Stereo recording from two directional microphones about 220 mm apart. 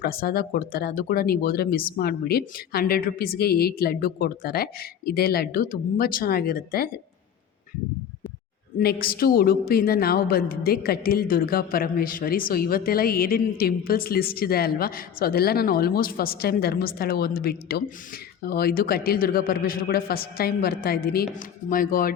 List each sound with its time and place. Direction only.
0.0 s a woman's voice: 45° left (ahead or behind)
8.8 s a woman's voice: 45° left (ahead or behind)